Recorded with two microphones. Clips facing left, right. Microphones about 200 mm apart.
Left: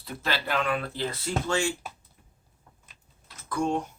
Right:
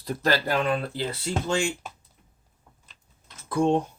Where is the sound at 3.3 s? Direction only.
25° right (ahead or behind).